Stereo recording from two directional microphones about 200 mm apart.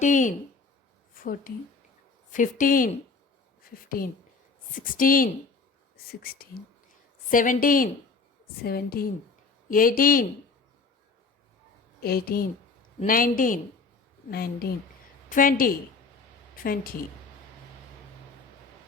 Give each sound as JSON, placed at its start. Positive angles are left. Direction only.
{"t": 0.0, "sound": "speech", "side_deg": 40}
{"t": 2.3, "sound": "a woman's voice", "side_deg": 40}
{"t": 11.9, "sound": "a woman's voice", "side_deg": 50}